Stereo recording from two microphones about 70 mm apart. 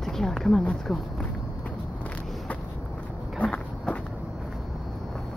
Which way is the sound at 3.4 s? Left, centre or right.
Centre.